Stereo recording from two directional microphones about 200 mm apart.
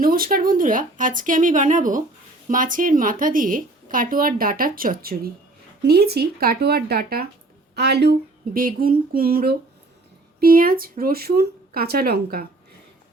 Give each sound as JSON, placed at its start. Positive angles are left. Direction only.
{"t": 0.0, "sound": "speech", "side_deg": -45}